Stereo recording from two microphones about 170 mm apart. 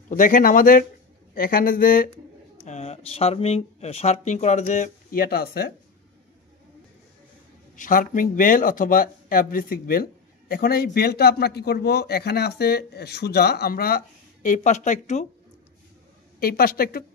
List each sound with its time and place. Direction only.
0.1 s a man's voice: 50° left (ahead or behind)
2.6 s speech: 40° left (ahead or behind); by 5.7 s 65° left (ahead or behind)
7.7 s a man's voice: 50° left (ahead or behind)
16.3 s a man's voice: 60° left (ahead or behind)